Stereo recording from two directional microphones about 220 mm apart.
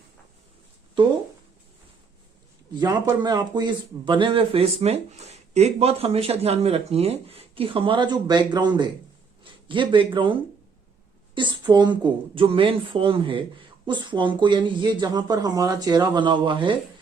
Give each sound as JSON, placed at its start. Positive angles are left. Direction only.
{"t": 2.7, "sound": "speech", "side_deg": -20}
{"t": 11.3, "sound": "speech", "side_deg": -20}